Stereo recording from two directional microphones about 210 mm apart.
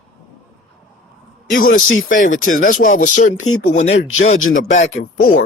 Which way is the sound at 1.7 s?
70° left (ahead or behind).